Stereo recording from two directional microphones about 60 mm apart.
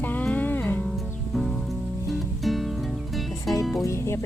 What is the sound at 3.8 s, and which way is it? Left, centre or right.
Music, left.